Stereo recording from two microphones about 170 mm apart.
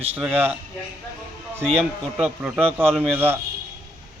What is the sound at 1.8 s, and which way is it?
A man's voice, centre (ahead or behind).